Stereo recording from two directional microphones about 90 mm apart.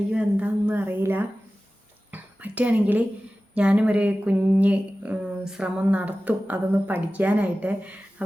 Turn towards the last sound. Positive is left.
turn(degrees=-15)  # may be behind; listen again after turning